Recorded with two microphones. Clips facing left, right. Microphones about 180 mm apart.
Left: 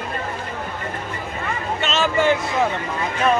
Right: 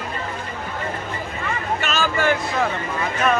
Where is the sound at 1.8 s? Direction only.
25° left (ahead or behind).